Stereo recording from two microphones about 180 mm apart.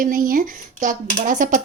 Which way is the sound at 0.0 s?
50° right (ahead or behind).